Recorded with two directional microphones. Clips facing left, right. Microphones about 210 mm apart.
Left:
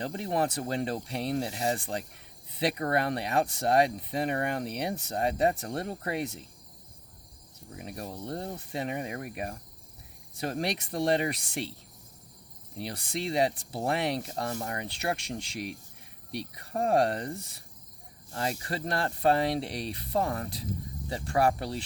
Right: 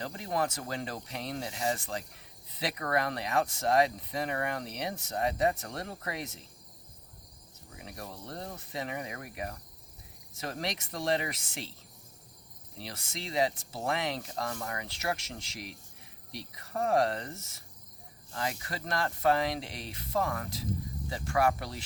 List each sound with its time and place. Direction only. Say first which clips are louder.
0.0 s speech: left 3 dB; 30° left (ahead or behind)
7.7 s speech: left 5 dB; 25° left (ahead or behind)
12.9 s speech: left 6 dB; 35° left (ahead or behind)
16.7 s speech: left 2 dB; 30° left (ahead or behind)